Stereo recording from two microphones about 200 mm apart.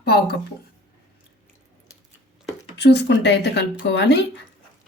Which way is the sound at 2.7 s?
60° left (ahead or behind).